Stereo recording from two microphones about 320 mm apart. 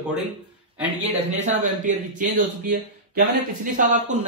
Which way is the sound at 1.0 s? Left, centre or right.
Right.